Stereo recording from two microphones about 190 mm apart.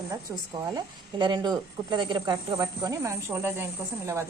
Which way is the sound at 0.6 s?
20° right (ahead or behind).